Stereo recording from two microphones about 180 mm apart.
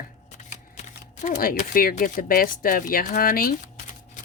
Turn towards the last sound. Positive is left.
turn(degrees=55)  # may be behind; listen again after turning